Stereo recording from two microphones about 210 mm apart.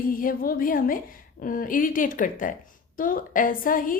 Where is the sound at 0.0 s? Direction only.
40° left (ahead or behind).